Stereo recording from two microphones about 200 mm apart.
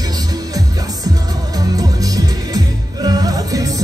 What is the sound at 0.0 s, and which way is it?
Music, 20° right (ahead or behind).